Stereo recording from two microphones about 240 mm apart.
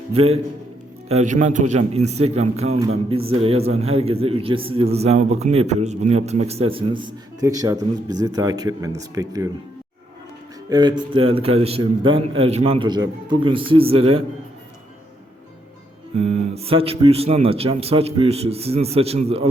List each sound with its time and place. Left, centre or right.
0.1 s a man's voice: right
10.7 s a man's voice: centre
16.1 s a man's voice: right